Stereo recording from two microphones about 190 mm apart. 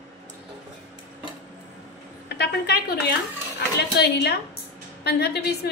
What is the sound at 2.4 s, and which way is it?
A woman's voice, 55° left (ahead or behind).